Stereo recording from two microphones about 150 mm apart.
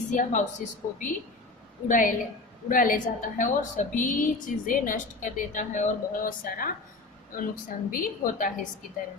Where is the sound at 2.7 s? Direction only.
65° left (ahead or behind).